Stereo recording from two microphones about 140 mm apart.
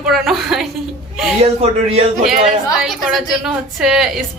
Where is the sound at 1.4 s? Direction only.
45° right (ahead or behind).